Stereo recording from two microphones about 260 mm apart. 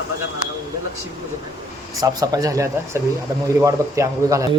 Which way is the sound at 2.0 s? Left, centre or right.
Centre.